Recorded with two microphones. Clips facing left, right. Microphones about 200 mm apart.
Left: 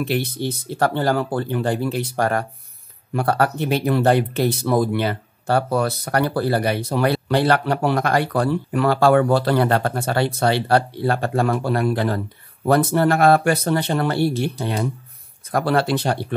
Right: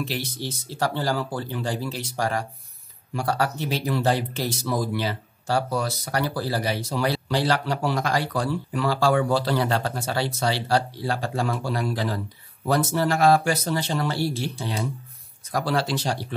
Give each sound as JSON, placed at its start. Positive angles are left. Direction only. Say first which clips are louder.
{"t": 0.0, "sound": "speech", "louder": "left 7 dB", "side_deg": 60}